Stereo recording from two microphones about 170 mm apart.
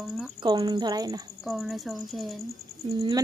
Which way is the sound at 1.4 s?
Centre (ahead or behind).